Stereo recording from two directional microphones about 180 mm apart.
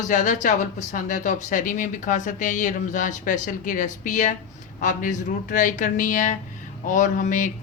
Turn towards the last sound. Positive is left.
turn(degrees=45)  # may be behind; listen again after turning